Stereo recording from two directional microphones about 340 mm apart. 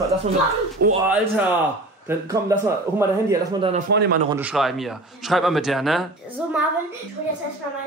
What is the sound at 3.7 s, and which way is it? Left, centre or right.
Speech, right.